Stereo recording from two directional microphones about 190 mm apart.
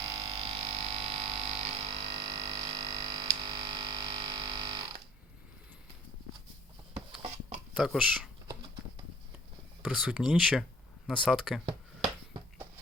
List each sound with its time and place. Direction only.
0.1 s frog: 30° right (ahead or behind)
3.3 s music: 25° right (ahead or behind)
7.2 s a sound: 35° right (ahead or behind)
7.8 s speech: centre (ahead or behind)
9.8 s speech: centre (ahead or behind)